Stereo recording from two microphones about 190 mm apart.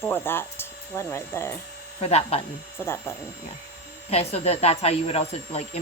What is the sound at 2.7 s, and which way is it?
Speech, 15° left (ahead or behind).